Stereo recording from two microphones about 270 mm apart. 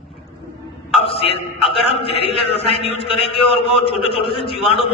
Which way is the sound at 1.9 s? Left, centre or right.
Left.